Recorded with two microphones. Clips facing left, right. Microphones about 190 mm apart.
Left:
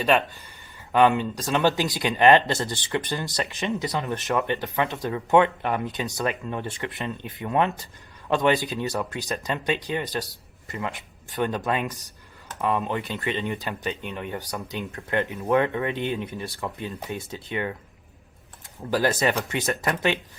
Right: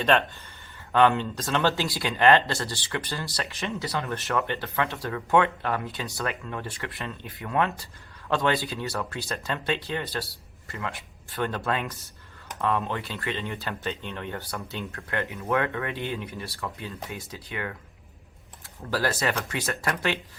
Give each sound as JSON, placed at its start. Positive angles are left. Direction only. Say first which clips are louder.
{"t": 0.0, "sound": "speech", "louder": "left 1 dB", "side_deg": 10}
{"t": 18.9, "sound": "speech", "louder": "left 4 dB", "side_deg": 15}